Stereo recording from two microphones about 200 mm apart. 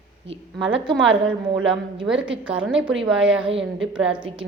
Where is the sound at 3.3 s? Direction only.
25° right (ahead or behind).